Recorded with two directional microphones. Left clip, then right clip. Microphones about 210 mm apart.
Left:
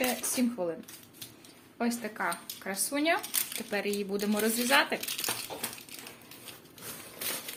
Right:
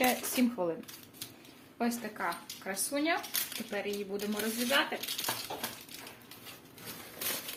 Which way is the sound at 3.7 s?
45° left (ahead or behind).